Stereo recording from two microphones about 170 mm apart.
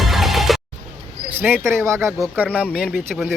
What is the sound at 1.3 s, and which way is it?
Speech, 10° right (ahead or behind).